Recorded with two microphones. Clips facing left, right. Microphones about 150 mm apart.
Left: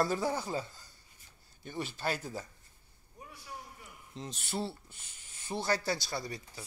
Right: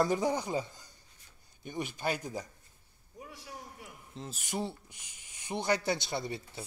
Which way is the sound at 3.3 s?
75° right (ahead or behind).